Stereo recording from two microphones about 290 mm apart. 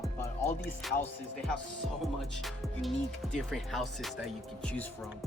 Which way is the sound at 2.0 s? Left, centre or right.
Centre.